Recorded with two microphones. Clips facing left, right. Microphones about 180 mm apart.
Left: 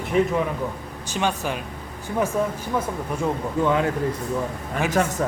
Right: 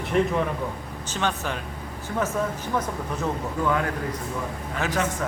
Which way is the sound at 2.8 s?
10° left (ahead or behind).